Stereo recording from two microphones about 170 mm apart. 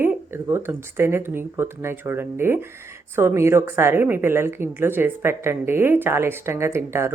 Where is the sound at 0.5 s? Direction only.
15° right (ahead or behind).